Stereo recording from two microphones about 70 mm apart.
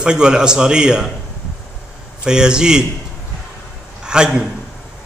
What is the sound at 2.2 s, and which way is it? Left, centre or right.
Speech, centre.